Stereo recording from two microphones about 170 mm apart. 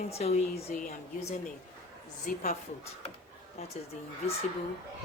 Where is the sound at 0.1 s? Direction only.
40° left (ahead or behind).